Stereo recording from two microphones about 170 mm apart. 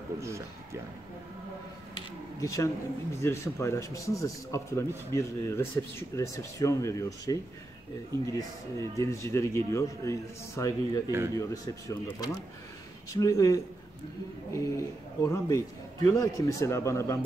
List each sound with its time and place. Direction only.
2.3 s speech: 20° left (ahead or behind)
8.7 s speech: 20° left (ahead or behind)
11.1 s speech: 15° right (ahead or behind)
11.3 s speech: 20° left (ahead or behind)